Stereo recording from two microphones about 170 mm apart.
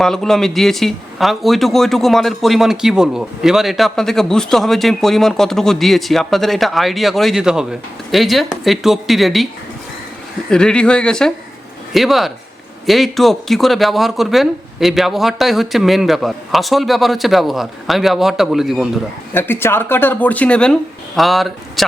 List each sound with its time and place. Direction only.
0.0 s speech: 5° left (ahead or behind)
10.5 s speech: 5° left (ahead or behind)
19.3 s speech: 10° left (ahead or behind)